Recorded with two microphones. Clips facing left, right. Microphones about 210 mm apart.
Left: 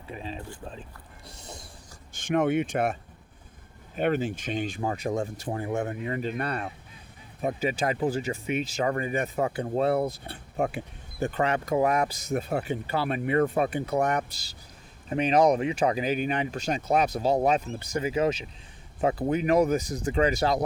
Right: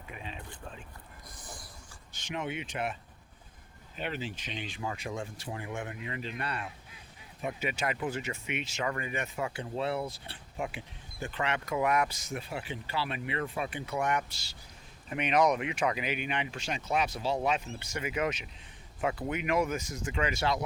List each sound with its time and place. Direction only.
0.1 s speech: 35° left (ahead or behind)
1.3 s a sound: 70° left (ahead or behind)
2.1 s speech: 50° left (ahead or behind)
7.4 s speech: 35° left (ahead or behind)